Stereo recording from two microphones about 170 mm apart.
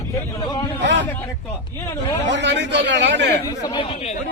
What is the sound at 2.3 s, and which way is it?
Speech, 90° right.